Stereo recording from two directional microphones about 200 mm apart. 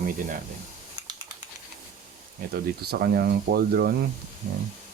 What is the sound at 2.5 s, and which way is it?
Speech, 50° right (ahead or behind).